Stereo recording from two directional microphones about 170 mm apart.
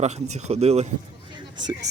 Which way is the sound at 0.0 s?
40° right (ahead or behind).